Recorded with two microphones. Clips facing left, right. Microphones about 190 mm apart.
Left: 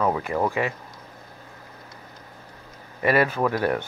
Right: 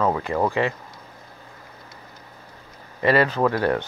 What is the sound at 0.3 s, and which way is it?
Speech, 40° right (ahead or behind).